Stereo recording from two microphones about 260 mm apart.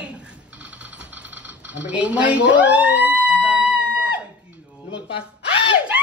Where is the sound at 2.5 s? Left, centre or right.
Centre.